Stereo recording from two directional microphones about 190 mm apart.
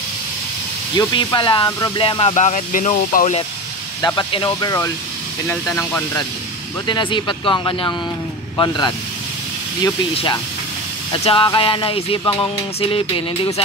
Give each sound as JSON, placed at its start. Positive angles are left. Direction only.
{"t": 0.9, "sound": "speech", "side_deg": 25}
{"t": 4.0, "sound": "speech", "side_deg": 20}
{"t": 6.9, "sound": "speech", "side_deg": 25}
{"t": 10.1, "sound": "speech", "side_deg": 25}